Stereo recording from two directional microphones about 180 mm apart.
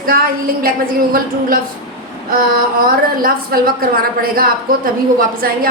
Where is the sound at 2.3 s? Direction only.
50° right (ahead or behind).